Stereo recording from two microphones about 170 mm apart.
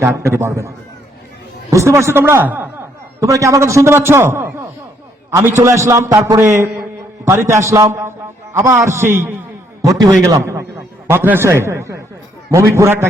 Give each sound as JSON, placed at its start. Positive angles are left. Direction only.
{"t": 0.0, "sound": "a man's voice", "side_deg": -15}
{"t": 1.7, "sound": "a man's voice", "side_deg": -15}